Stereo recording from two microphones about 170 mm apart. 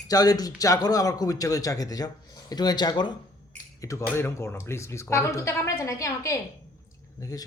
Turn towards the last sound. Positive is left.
turn(degrees=20)  # may be behind; listen again after turning